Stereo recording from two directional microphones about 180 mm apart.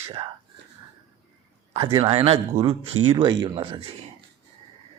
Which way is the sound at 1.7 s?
30° right (ahead or behind).